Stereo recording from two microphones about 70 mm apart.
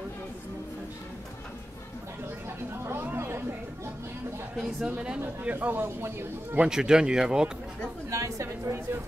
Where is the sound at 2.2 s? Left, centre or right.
Right.